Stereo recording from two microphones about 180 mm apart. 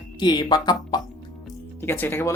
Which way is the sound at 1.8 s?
10° left (ahead or behind).